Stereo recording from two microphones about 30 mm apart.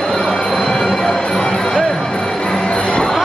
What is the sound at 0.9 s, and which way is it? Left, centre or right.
Music, centre.